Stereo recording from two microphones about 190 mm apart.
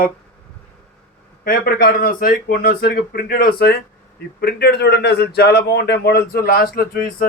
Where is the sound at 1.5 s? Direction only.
55° left (ahead or behind).